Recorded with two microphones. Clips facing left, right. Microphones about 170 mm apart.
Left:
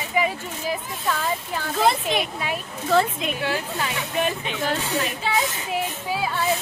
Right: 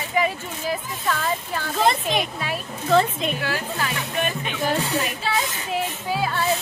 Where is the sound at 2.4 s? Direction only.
10° left (ahead or behind).